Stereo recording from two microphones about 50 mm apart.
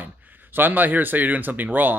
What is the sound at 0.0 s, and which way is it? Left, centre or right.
Speech, right.